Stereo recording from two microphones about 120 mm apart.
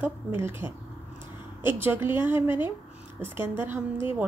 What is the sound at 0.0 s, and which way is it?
A woman's voice, 15° right (ahead or behind).